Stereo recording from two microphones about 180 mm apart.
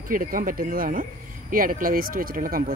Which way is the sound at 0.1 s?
50° right (ahead or behind).